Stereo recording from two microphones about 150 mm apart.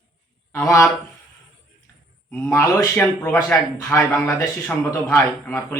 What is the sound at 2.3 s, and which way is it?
A man's voice, 15° left (ahead or behind).